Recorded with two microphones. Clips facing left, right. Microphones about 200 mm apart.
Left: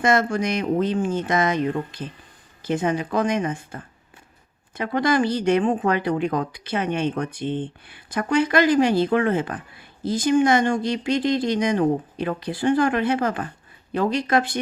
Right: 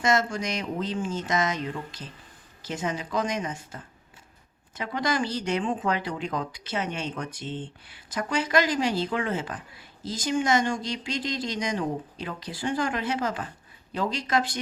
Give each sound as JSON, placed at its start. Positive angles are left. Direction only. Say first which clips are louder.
{"t": 0.0, "sound": "speech", "louder": "left 5 dB", "side_deg": 55}